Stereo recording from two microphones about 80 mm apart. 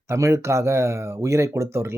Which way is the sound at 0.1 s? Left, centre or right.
Right.